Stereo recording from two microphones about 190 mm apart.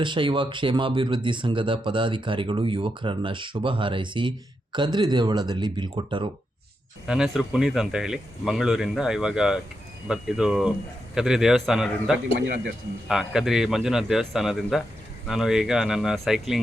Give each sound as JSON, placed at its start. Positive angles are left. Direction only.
{"t": 0.0, "sound": "speech", "side_deg": -25}
{"t": 7.1, "sound": "speech", "side_deg": -5}